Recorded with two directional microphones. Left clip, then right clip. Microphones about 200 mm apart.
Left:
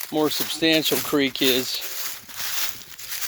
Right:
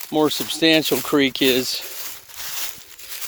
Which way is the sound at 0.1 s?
35° right (ahead or behind).